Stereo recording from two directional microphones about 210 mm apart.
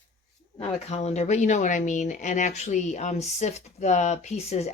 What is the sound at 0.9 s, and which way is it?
Speech, 30° left (ahead or behind).